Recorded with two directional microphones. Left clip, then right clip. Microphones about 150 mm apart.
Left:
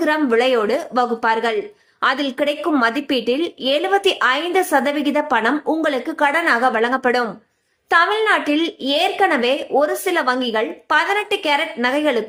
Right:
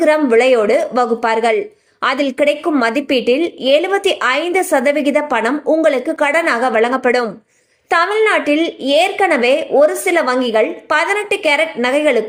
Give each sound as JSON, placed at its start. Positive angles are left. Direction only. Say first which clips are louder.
{"t": 0.0, "sound": "a woman's voice", "louder": "right 5 dB", "side_deg": -20}